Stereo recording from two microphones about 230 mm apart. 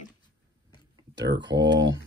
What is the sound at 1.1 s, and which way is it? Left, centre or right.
Speech, right.